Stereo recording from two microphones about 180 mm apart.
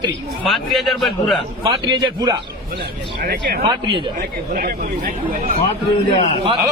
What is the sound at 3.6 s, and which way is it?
Speech, 25° right (ahead or behind).